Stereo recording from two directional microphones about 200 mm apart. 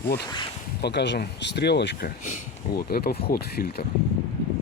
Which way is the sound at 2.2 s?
45° left (ahead or behind).